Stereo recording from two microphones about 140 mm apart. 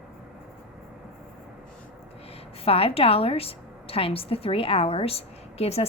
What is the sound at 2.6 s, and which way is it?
A woman's voice, 45° left (ahead or behind).